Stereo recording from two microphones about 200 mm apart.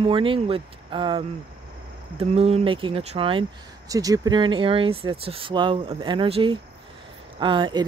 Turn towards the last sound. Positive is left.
turn(degrees=-25)  # may be behind; listen again after turning